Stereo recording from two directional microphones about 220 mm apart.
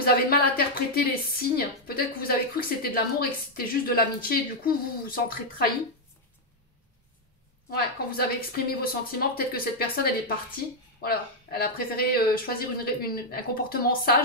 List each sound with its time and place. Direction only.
0.0 s a woman's voice: 45° left (ahead or behind)
7.7 s a woman's voice: 45° left (ahead or behind)